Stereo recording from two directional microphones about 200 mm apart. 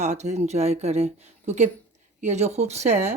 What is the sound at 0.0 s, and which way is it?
Speech, 35° right (ahead or behind).